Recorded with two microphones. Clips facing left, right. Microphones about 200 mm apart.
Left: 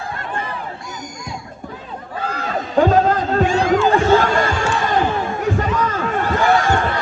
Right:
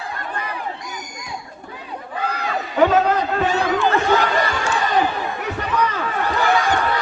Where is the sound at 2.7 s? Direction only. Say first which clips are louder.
Left 2 dB; 45° left (ahead or behind).